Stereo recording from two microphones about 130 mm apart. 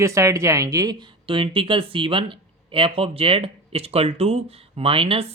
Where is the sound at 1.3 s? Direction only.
40° right (ahead or behind).